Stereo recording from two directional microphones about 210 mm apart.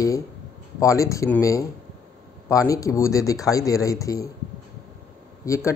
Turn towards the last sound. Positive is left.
turn(degrees=15)  # may be behind; listen again after turning